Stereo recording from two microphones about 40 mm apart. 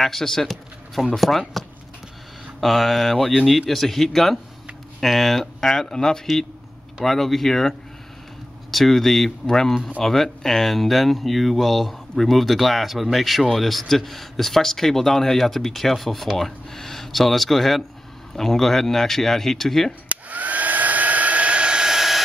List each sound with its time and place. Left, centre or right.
0.0 s speech: centre
2.6 s speech: centre
8.7 s speech: centre
20.1 s hair dryer: right; by 22.2 s centre